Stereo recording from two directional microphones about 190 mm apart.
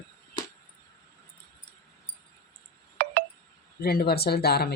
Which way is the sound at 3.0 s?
50° right (ahead or behind).